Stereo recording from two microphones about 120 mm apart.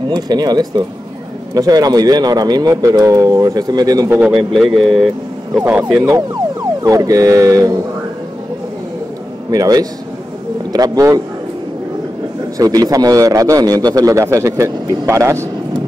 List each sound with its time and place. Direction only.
0.1 s a man's voice: 35° right (ahead or behind)
4.1 s speech: 10° right (ahead or behind)
5.6 s speech: 15° right (ahead or behind)
6.8 s a man's voice: 30° right (ahead or behind)
9.5 s a man's voice: 30° right (ahead or behind)
12.5 s a man's voice: 30° right (ahead or behind)